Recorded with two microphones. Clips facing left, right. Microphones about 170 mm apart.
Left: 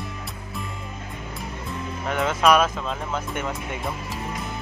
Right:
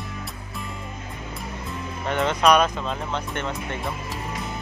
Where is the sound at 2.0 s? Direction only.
5° left (ahead or behind).